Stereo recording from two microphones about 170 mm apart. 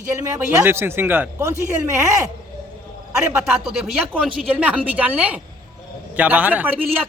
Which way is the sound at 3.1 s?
5° right (ahead or behind).